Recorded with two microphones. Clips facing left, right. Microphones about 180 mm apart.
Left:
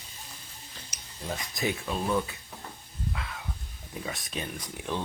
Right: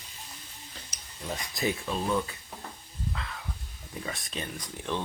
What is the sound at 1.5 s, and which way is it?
Speech, centre (ahead or behind).